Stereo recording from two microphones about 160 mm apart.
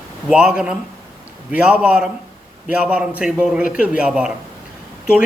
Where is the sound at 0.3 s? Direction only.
5° right (ahead or behind).